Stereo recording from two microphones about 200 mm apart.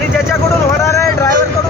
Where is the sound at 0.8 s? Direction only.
15° left (ahead or behind).